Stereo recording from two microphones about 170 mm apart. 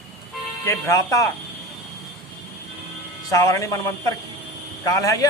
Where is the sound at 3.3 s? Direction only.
20° left (ahead or behind).